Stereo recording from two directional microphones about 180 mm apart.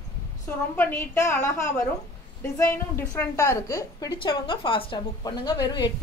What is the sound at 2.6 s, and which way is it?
A woman's voice, 15° left (ahead or behind).